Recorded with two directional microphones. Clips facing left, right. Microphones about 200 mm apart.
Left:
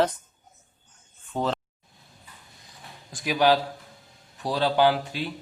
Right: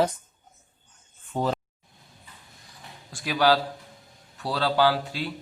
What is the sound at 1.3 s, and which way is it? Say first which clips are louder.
Speech: right 1 dB; 5° right (ahead or behind).